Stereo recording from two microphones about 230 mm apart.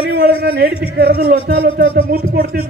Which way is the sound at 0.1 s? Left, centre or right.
Right.